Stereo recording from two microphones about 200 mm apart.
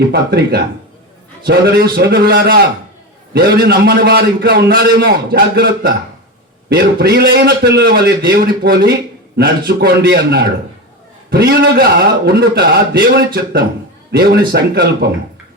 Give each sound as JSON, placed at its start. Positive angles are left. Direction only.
{"t": 0.1, "sound": "a man's voice", "side_deg": -55}